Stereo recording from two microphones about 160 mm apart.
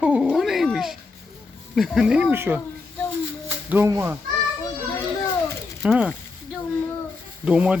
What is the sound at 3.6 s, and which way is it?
Speech, 10° right (ahead or behind).